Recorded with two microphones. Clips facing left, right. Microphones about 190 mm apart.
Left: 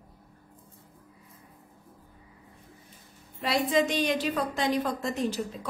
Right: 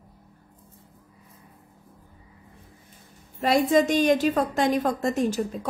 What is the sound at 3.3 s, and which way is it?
A woman's voice, 45° right (ahead or behind).